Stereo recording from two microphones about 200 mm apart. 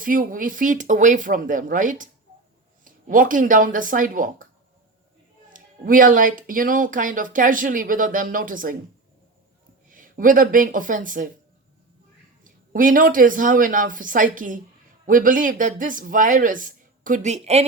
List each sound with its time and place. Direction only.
0.0 s speech: 45° right (ahead or behind)
5.5 s speech: 45° right (ahead or behind)
9.9 s speech: 45° right (ahead or behind)
12.5 s speech: 40° right (ahead or behind)